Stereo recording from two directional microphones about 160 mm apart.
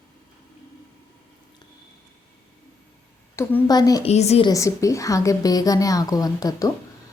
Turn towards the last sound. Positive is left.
turn(degrees=20)  # may be behind; listen again after turning